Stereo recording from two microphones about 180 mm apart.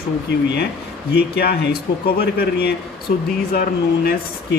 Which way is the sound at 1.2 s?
60° left (ahead or behind).